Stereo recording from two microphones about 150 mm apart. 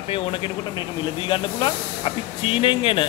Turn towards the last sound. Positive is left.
turn(degrees=35)  # may be behind; listen again after turning